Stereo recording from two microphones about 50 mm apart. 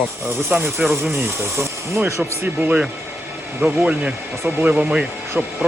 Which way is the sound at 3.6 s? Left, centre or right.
Right.